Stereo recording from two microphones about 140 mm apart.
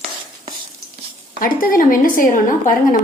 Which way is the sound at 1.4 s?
80° left.